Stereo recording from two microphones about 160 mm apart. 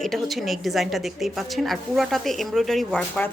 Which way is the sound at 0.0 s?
Centre (ahead or behind).